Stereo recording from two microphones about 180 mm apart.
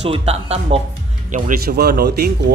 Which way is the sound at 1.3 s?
50° right (ahead or behind).